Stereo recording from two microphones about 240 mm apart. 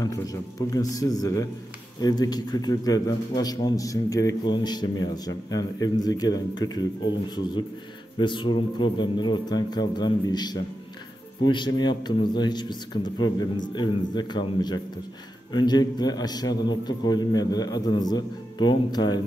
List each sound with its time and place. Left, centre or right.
0.0 s a man's voice: centre